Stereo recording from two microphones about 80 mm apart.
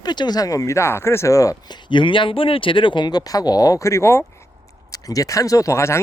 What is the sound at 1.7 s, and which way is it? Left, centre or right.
Speech, left.